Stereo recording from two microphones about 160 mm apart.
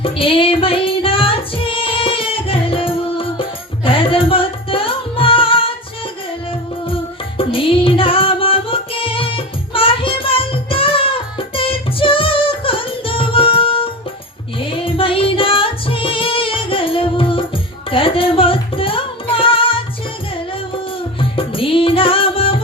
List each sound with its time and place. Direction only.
0.0 s music: 35° left (ahead or behind)
21.2 s music: 35° left (ahead or behind)